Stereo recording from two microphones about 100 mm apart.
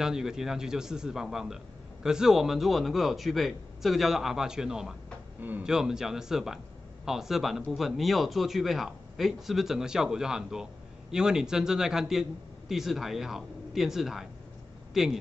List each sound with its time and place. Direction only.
0.0 s a man's voice: 5° right (ahead or behind)
5.4 s speech: 20° right (ahead or behind)
5.7 s a man's voice: 5° right (ahead or behind)